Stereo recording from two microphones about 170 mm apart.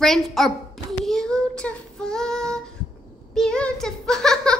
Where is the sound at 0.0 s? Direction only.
Centre (ahead or behind).